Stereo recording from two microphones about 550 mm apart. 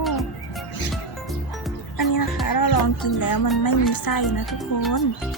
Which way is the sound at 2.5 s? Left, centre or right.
Left.